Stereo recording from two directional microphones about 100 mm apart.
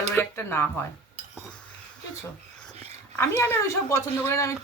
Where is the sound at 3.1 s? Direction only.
25° left (ahead or behind).